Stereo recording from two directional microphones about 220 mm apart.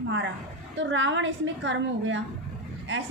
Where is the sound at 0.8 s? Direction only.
55° right (ahead or behind).